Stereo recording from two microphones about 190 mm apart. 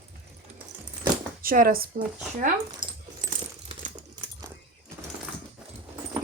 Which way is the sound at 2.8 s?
25° right (ahead or behind).